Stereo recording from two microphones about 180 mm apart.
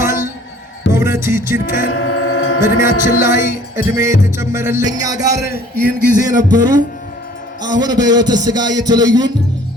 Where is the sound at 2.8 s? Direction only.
15° right (ahead or behind).